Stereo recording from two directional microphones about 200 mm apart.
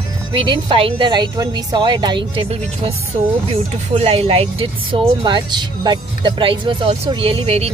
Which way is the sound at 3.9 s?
30° right (ahead or behind).